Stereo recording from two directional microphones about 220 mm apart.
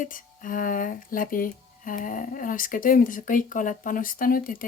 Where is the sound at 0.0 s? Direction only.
40° left (ahead or behind).